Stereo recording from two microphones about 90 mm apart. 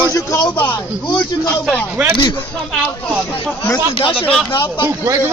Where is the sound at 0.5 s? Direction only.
20° left (ahead or behind).